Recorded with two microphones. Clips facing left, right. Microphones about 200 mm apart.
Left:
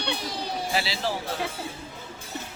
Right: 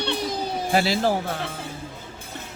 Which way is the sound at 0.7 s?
50° right (ahead or behind).